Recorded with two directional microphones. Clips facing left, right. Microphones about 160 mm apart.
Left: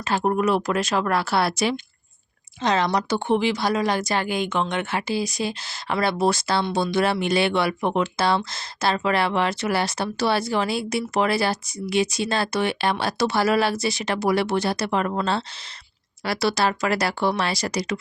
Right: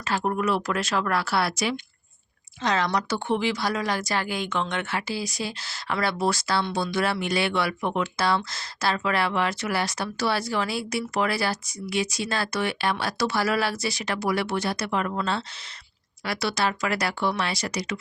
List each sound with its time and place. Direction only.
0.0 s speech: 20° left (ahead or behind); by 17.9 s 35° left (ahead or behind)